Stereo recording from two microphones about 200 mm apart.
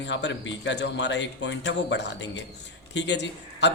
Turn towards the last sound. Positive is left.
turn(degrees=60)  # may be behind; listen again after turning